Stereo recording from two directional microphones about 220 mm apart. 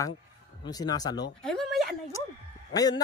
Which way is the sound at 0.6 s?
15° left (ahead or behind).